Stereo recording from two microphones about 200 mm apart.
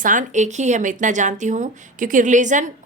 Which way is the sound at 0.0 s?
40° right (ahead or behind).